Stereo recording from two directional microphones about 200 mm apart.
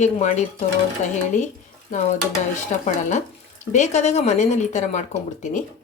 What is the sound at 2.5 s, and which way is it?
Speech, 35° left (ahead or behind).